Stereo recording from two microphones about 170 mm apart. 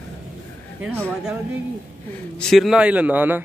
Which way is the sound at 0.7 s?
10° right (ahead or behind).